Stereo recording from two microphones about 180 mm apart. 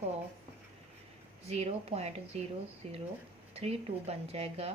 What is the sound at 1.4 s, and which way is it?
Speech, 35° right (ahead or behind).